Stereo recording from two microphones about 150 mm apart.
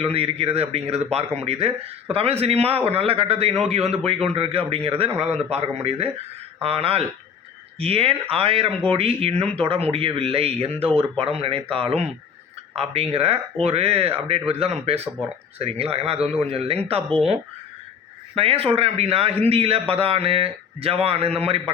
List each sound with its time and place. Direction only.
0.0 s a man's voice: 40° right (ahead or behind)